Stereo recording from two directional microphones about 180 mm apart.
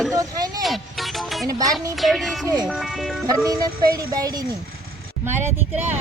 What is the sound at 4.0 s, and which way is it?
Speech, 20° right (ahead or behind).